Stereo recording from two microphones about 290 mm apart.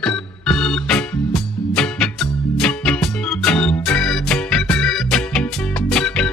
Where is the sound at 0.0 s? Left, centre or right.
Centre.